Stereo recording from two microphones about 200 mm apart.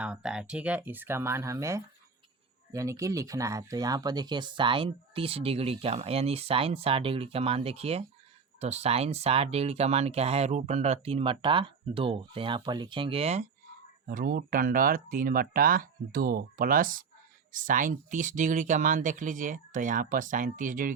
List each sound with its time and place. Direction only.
0.0 s speech: 5° right (ahead or behind); by 13.5 s 30° right (ahead or behind)
14.1 s speech: 45° right (ahead or behind)